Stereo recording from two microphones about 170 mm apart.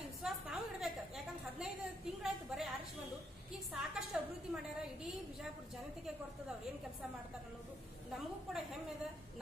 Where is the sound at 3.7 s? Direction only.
Centre (ahead or behind).